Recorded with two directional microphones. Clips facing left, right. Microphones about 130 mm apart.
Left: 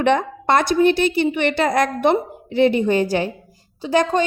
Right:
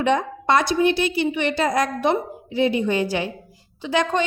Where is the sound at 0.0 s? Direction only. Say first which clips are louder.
Left 3 dB; 60° left (ahead or behind).